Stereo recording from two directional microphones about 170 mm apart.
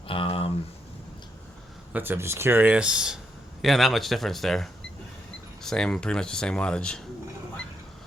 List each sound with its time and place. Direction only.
0.1 s speech: 30° left (ahead or behind)
1.9 s speech: 10° right (ahead or behind); by 7.0 s 5° left (ahead or behind)